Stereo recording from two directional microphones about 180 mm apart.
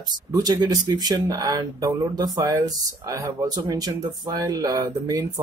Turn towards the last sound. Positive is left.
turn(degrees=-20)  # may be behind; listen again after turning